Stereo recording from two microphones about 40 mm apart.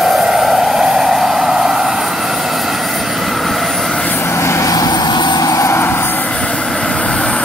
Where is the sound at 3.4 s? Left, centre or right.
Centre.